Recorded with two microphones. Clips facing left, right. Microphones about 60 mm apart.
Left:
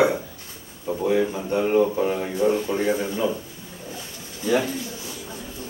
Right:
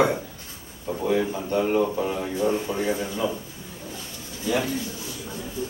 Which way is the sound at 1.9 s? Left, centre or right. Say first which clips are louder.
Left 3 dB; centre.